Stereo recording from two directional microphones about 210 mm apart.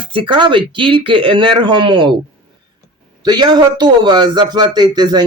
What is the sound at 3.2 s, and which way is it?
Speech, 20° right (ahead or behind).